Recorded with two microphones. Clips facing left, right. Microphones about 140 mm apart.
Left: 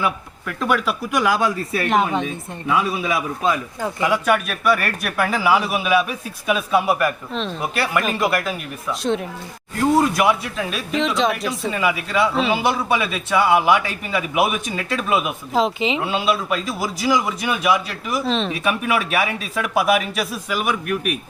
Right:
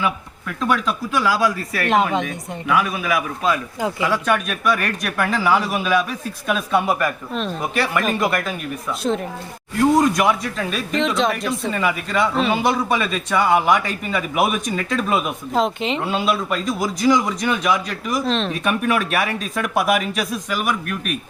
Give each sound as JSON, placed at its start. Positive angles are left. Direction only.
{"t": 0.0, "sound": "speech", "side_deg": 0}
{"t": 1.1, "sound": "speech", "side_deg": 20}
{"t": 4.0, "sound": "speech", "side_deg": 10}